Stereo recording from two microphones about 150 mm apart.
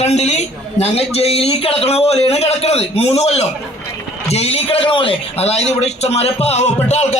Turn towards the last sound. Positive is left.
turn(degrees=50)  # may be behind; listen again after turning